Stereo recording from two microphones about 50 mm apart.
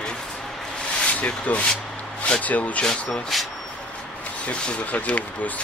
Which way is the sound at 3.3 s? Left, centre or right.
Centre.